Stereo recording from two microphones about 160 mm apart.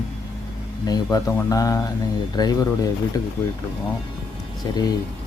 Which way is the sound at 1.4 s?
20° left (ahead or behind).